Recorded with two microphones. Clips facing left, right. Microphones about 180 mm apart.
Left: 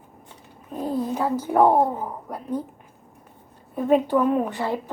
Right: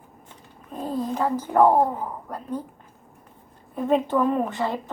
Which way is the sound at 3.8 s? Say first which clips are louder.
Left 2 dB; 5° left (ahead or behind).